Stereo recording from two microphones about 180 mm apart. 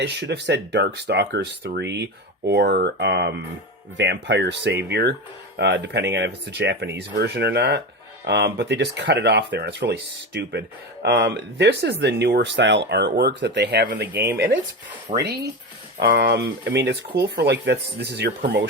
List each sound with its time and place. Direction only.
0.0 s speech: 70° right (ahead or behind)
5.5 s speech: 75° right (ahead or behind)
11.0 s speech: 65° right (ahead or behind)
14.1 s speech: 10° right (ahead or behind)
15.1 s speech: 40° right (ahead or behind)
16.0 s speech: 65° right (ahead or behind)